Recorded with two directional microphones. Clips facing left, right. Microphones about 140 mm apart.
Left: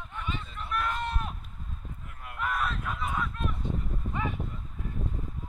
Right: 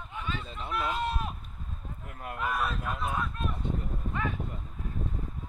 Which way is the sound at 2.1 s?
45° right (ahead or behind).